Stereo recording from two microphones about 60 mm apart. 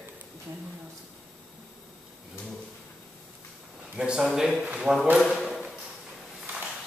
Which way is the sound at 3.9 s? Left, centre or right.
Centre.